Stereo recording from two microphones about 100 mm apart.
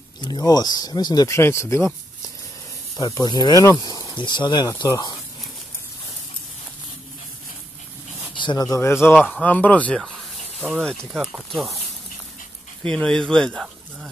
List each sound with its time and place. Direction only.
0.2 s speech: 40° left (ahead or behind)
1.3 s speech: 25° left (ahead or behind)
3.0 s speech: 35° left (ahead or behind)
4.8 s speech: 35° left (ahead or behind)
8.4 s a sound: 55° left (ahead or behind)
8.6 s speech: 30° left (ahead or behind)
10.6 s speech: 5° left (ahead or behind)
12.8 s speech: 10° left (ahead or behind)